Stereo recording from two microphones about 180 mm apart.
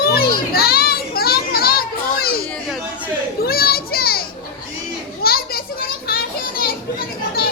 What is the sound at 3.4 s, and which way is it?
Children playing, 60° left (ahead or behind).